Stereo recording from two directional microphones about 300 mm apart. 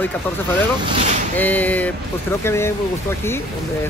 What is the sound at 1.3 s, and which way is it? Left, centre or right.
Speech, centre.